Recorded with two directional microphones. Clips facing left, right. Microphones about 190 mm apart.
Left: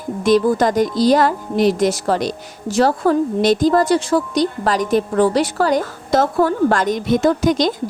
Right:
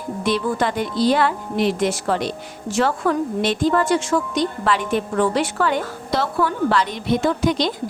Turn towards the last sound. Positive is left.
turn(degrees=45)  # may be behind; listen again after turning